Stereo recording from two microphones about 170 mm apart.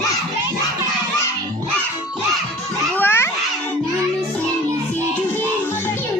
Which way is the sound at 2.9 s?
10° left (ahead or behind).